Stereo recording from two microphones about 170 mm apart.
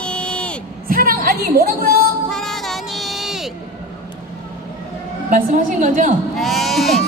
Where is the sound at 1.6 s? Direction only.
65° right (ahead or behind).